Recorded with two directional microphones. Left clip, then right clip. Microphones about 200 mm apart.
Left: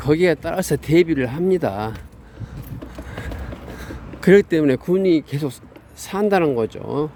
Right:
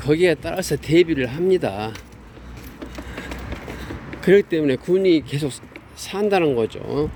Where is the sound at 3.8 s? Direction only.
25° left (ahead or behind).